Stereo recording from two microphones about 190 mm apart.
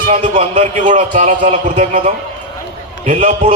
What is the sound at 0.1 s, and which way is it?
A man's voice, 35° right (ahead or behind).